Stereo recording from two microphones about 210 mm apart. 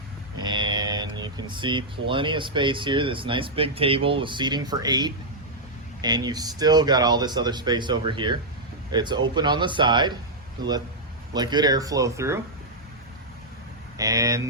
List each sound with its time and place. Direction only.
0.3 s speech: 20° right (ahead or behind)
14.0 s speech: 15° right (ahead or behind)